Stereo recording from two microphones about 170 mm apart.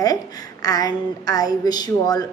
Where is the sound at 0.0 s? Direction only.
20° left (ahead or behind).